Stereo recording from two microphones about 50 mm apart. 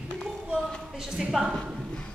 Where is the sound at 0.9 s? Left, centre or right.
Centre.